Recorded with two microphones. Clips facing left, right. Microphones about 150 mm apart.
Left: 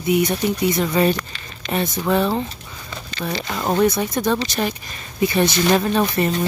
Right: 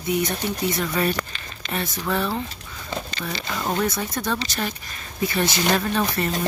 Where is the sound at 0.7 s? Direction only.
20° left (ahead or behind).